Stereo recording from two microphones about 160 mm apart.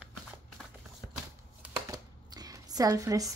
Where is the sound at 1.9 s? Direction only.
25° right (ahead or behind).